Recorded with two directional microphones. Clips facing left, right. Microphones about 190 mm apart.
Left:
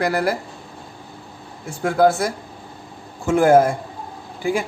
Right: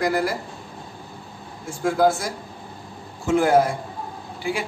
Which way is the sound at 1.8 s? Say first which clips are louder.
Left 3 dB; 60° left (ahead or behind).